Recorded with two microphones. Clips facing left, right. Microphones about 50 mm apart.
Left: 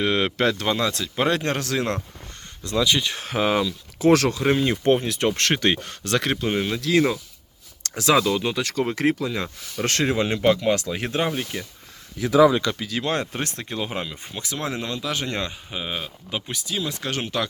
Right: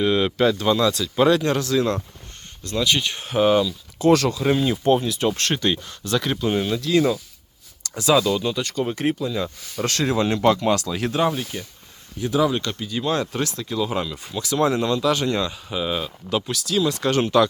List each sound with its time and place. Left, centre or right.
0.0 s speech: left
3.2 s speech: left
4.6 s speech: left
6.5 s speech: left
6.7 s speech: left
7.9 s speech: left
9.7 s speech: left
10.1 s speech: centre
12.8 s speech: left
13.1 s speech: left; by 15.3 s centre
15.3 s speech: left
15.8 s speech: centre